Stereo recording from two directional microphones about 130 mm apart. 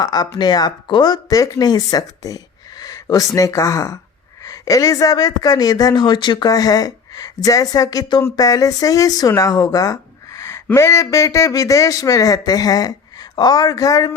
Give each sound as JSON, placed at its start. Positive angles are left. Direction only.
{"t": 0.0, "sound": "speech", "side_deg": 30}